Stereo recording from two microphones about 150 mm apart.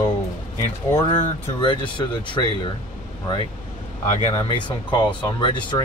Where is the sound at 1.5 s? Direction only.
35° left (ahead or behind).